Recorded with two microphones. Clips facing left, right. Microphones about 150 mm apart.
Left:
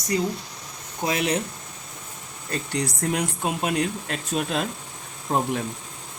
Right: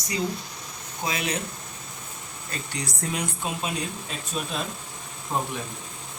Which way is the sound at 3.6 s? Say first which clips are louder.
Left 6 dB; 80° left.